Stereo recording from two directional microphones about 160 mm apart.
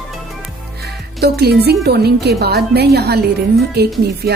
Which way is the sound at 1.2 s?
85° right.